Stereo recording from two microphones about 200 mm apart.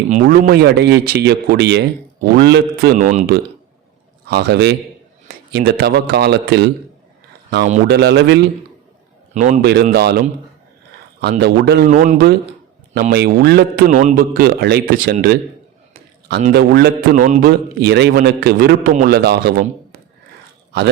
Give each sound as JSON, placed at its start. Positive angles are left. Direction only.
{"t": 0.1, "sound": "speech", "side_deg": -45}
{"t": 4.3, "sound": "speech", "side_deg": -55}
{"t": 7.9, "sound": "speech", "side_deg": -55}
{"t": 9.3, "sound": "speech", "side_deg": -35}
{"t": 9.6, "sound": "speech", "side_deg": -50}
{"t": 11.9, "sound": "speech", "side_deg": -45}
{"t": 13.8, "sound": "speech", "side_deg": -40}
{"t": 16.5, "sound": "speech", "side_deg": -55}
{"t": 17.7, "sound": "speech", "side_deg": -55}